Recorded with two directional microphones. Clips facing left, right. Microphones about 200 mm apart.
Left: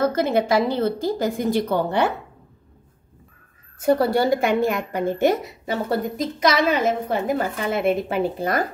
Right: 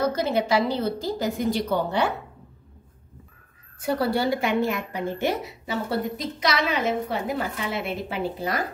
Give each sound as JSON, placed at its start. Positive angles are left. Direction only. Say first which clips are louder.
{"t": 0.1, "sound": "a woman's voice", "louder": "left 3 dB", "side_deg": 50}
{"t": 3.8, "sound": "a woman's voice", "louder": "left 5 dB", "side_deg": 45}